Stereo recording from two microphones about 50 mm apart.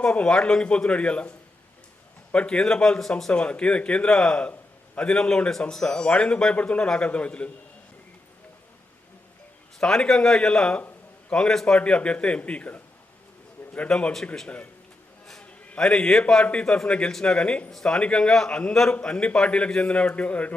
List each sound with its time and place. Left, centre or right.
0.0 s a man's voice: left
2.3 s a man's voice: left
4.1 s a man's voice: centre
9.7 s a man's voice: centre
11.8 s a man's voice: left
13.6 s a sound: left
14.4 s a man's voice: left
15.8 s a man's voice: centre
17.7 s a man's voice: centre; by 20.5 s left